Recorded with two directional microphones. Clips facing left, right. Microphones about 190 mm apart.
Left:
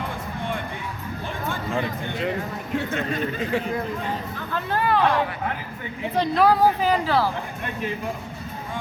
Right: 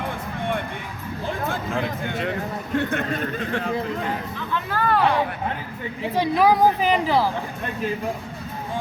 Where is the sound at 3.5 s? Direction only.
10° left (ahead or behind).